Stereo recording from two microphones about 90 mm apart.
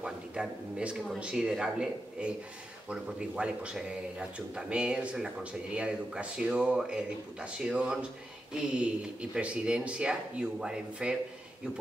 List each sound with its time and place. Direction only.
0.0 s speech: 10° right (ahead or behind)